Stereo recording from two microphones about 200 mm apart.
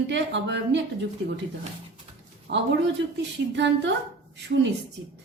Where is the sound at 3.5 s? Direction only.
60° right (ahead or behind).